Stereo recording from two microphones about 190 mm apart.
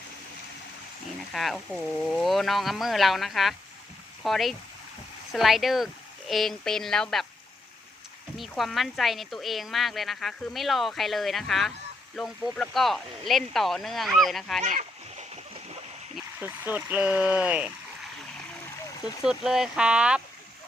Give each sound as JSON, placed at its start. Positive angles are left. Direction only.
{"t": 1.3, "sound": "speech", "side_deg": 0}
{"t": 8.4, "sound": "speech", "side_deg": 0}
{"t": 14.6, "sound": "a sound", "side_deg": -40}
{"t": 16.1, "sound": "speech", "side_deg": -10}
{"t": 19.2, "sound": "speech", "side_deg": 0}